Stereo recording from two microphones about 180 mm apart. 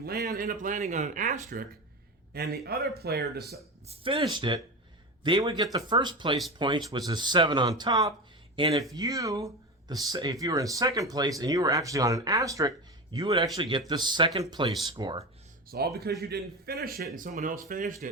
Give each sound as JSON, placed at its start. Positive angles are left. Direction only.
{"t": 0.0, "sound": "speech", "side_deg": -55}
{"t": 2.3, "sound": "speech", "side_deg": -60}
{"t": 3.8, "sound": "speech", "side_deg": -30}
{"t": 15.7, "sound": "speech", "side_deg": -60}